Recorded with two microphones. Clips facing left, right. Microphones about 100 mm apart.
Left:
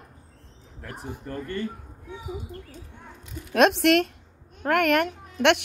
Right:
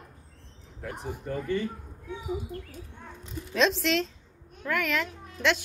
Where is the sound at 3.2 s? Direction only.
60° left (ahead or behind).